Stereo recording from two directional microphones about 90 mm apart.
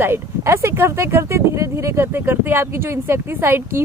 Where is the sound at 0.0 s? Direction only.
30° right (ahead or behind).